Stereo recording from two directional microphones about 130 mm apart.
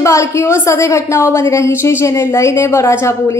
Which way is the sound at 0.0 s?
20° left (ahead or behind).